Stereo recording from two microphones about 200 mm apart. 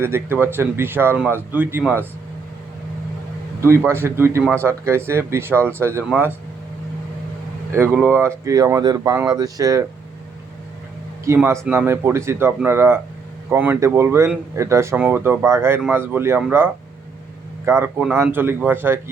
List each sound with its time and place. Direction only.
0.0 s speech: 10° right (ahead or behind)
3.6 s speech: 10° right (ahead or behind)
7.7 s speech: 10° right (ahead or behind)
11.3 s speech: 15° right (ahead or behind)
17.7 s speech: 10° right (ahead or behind)